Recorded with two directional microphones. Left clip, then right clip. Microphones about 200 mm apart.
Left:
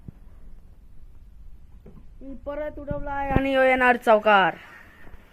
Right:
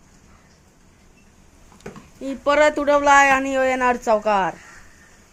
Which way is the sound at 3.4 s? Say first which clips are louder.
Even; centre (ahead or behind).